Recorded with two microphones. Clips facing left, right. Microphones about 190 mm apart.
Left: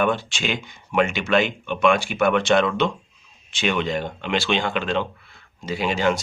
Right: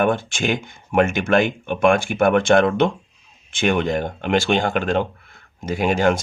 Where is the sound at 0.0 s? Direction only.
50° right (ahead or behind).